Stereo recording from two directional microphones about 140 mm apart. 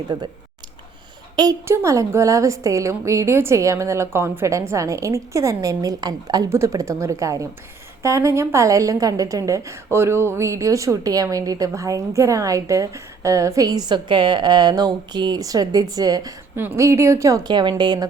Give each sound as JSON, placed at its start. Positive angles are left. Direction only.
{"t": 1.4, "sound": "a woman's voice", "side_deg": -25}